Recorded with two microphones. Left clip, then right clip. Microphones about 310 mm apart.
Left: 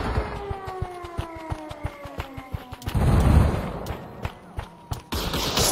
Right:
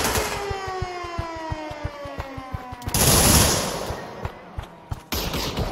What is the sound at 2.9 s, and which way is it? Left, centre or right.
Fusillade, right.